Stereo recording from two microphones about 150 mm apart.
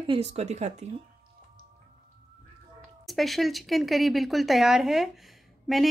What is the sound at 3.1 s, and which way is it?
Speech, centre (ahead or behind).